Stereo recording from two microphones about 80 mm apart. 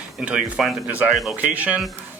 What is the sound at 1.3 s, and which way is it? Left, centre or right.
Speech, right.